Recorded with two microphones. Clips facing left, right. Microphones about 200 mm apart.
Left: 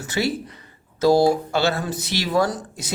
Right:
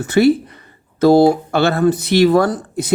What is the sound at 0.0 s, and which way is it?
Speech, 55° right (ahead or behind).